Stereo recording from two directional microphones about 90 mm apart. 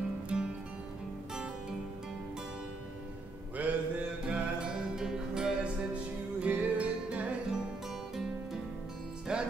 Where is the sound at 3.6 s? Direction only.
15° right (ahead or behind).